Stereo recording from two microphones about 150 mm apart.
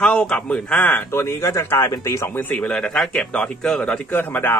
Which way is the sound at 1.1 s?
15° left (ahead or behind).